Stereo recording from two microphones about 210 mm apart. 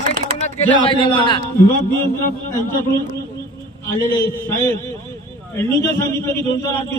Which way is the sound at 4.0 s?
15° left (ahead or behind).